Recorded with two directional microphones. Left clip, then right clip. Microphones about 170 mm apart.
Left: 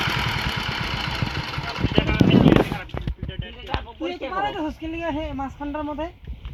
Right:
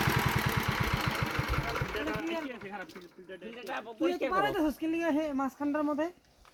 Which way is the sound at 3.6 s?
40° left (ahead or behind).